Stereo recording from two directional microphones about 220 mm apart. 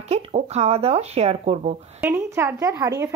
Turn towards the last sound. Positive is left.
turn(degrees=-15)  # may be behind; listen again after turning